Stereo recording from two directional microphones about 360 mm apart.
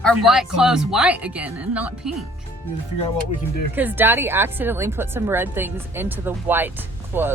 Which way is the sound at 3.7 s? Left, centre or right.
Centre.